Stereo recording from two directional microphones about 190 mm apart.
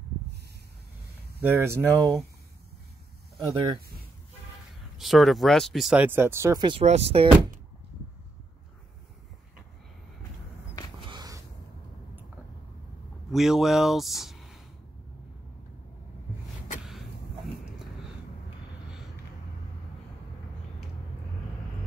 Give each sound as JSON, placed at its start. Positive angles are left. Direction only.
{"t": 1.4, "sound": "speech", "side_deg": -10}
{"t": 4.9, "sound": "speech", "side_deg": 0}
{"t": 6.8, "sound": "speech", "side_deg": -35}
{"t": 11.1, "sound": "a sound", "side_deg": -20}
{"t": 13.3, "sound": "speech", "side_deg": 0}